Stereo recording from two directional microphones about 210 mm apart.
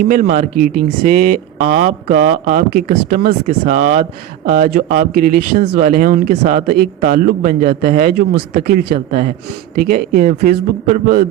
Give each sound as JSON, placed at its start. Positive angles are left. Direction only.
{"t": 0.0, "sound": "a man's voice", "side_deg": -40}